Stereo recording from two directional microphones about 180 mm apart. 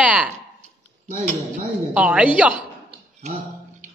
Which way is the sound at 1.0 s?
45° right (ahead or behind).